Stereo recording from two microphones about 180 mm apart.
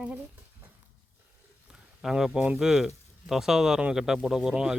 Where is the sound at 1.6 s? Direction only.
5° right (ahead or behind).